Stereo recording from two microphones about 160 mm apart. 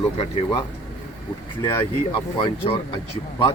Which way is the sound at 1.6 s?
20° left (ahead or behind).